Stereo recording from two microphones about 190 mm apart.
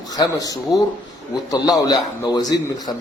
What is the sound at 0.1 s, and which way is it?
A man's voice, 20° left (ahead or behind).